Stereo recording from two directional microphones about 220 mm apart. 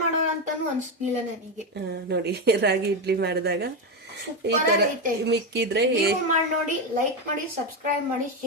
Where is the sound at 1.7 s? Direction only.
50° right (ahead or behind).